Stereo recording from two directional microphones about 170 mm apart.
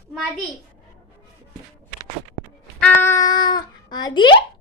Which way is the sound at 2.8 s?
10° left (ahead or behind).